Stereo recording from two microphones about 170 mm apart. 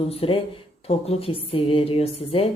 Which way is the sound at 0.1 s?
35° left (ahead or behind).